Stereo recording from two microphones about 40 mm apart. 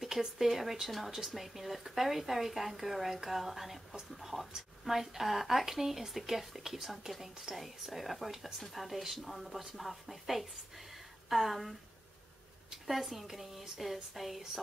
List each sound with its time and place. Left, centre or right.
0.0 s speech: centre
12.8 s speech: centre